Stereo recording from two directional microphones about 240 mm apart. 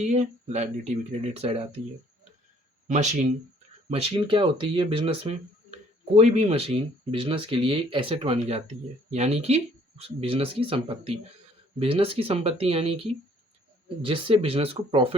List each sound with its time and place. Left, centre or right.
0.0 s speech: right
2.8 s speech: right